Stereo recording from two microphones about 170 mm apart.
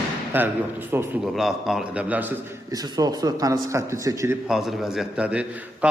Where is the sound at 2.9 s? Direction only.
25° right (ahead or behind).